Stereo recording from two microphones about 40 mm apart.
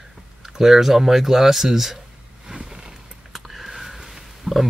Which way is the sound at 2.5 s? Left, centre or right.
Centre.